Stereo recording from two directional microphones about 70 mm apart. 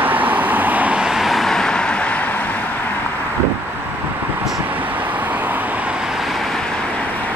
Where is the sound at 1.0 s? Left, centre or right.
Centre; by 3.0 s left.